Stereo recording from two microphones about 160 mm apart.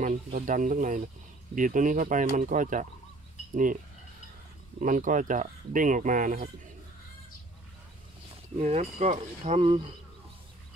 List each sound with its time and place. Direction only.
0.0 s speech: 55° right (ahead or behind)
4.7 s speech: 50° right (ahead or behind)
8.5 s speech: 45° right (ahead or behind)